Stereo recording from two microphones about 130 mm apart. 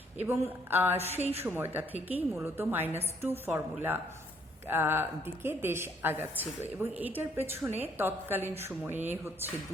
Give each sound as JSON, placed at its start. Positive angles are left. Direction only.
{"t": 0.3, "sound": "a woman's voice", "side_deg": -15}
{"t": 0.9, "sound": "a woman's voice", "side_deg": -55}
{"t": 1.5, "sound": "a woman's voice", "side_deg": -15}